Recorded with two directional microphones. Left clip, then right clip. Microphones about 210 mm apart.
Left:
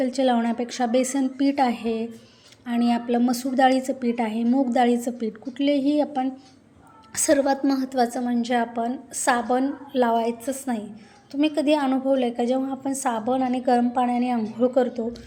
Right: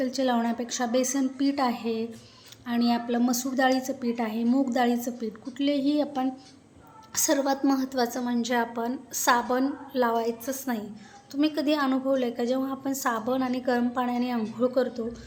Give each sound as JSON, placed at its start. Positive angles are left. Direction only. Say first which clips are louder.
{"t": 0.0, "sound": "a woman's voice", "louder": "left 4 dB", "side_deg": 10}